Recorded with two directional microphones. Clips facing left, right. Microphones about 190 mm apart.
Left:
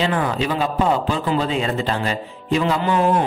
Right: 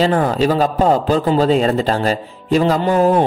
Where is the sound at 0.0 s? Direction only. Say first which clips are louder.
Right 6 dB; 40° right (ahead or behind).